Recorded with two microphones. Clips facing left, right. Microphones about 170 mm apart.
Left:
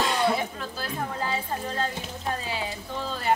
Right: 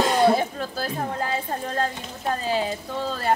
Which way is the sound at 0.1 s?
40° right (ahead or behind).